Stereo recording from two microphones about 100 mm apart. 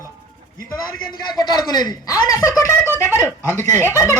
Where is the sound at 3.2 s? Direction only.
25° left (ahead or behind).